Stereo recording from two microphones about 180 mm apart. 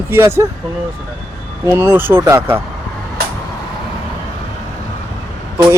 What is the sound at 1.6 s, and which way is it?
Speech, 15° right (ahead or behind).